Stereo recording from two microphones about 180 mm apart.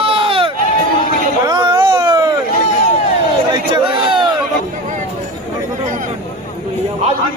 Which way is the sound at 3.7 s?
25° right (ahead or behind).